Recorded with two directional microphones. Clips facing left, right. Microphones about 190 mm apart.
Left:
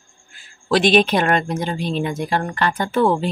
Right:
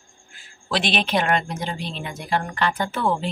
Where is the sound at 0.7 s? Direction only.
45° left (ahead or behind).